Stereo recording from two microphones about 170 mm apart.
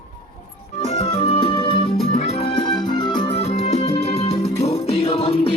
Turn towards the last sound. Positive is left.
turn(degrees=35)  # may be behind; listen again after turning